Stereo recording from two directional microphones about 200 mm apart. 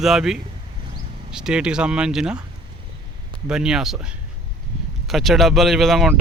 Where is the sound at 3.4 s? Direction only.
5° right (ahead or behind).